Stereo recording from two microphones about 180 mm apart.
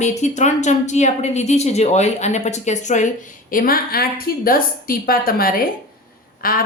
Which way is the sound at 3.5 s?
55° left (ahead or behind).